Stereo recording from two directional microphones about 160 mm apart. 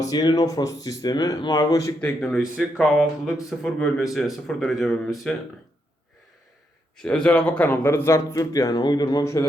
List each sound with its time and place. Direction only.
0.0 s speech: 25° left (ahead or behind)
2.0 s speech: 5° left (ahead or behind)
6.9 s speech: 5° left (ahead or behind)